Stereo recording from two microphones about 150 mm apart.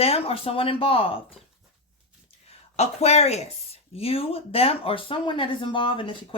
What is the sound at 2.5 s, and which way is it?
A woman's voice, 45° left (ahead or behind).